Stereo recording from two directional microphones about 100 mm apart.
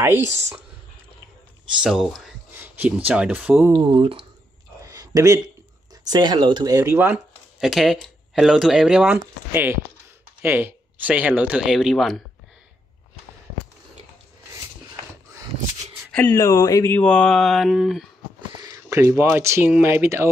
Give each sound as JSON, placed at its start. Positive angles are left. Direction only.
{"t": 1.8, "sound": "mantra", "side_deg": -5}
{"t": 2.5, "sound": "speech", "side_deg": -20}
{"t": 3.7, "sound": "speech", "side_deg": -60}
{"t": 4.8, "sound": "a sound", "side_deg": -35}
{"t": 6.0, "sound": "speech", "side_deg": -45}
{"t": 6.7, "sound": "speech", "side_deg": -30}
{"t": 7.6, "sound": "speech", "side_deg": 0}
{"t": 16.3, "sound": "speech", "side_deg": 35}
{"t": 16.9, "sound": "mantra", "side_deg": 10}
{"t": 18.6, "sound": "a sound", "side_deg": -35}
{"t": 19.4, "sound": "speech", "side_deg": -25}